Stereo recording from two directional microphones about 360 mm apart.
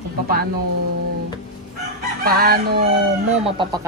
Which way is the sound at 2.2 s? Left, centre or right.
Right.